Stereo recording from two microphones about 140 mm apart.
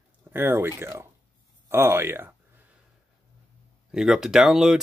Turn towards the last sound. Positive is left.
turn(degrees=-5)  # may be behind; listen again after turning